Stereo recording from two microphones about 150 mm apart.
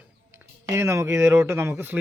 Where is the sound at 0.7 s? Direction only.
20° right (ahead or behind).